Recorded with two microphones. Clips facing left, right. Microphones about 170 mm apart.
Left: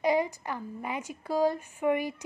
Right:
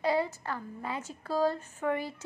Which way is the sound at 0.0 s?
15° left (ahead or behind).